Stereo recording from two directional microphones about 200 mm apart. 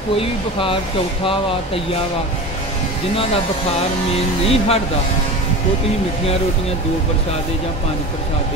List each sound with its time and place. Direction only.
0.2 s music: 25° left (ahead or behind)
4.1 s music: 30° left (ahead or behind)